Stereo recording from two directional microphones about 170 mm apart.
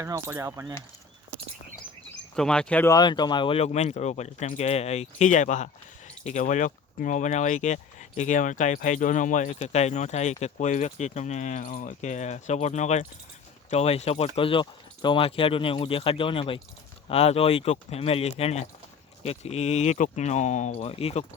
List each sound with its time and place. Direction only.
0.0 s speech: 15° right (ahead or behind)
2.3 s speech: 5° left (ahead or behind)
2.9 s speech: 25° left (ahead or behind)